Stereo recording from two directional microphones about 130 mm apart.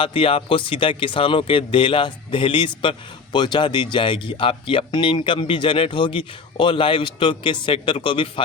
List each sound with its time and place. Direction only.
0.0 s speech: 45° left (ahead or behind)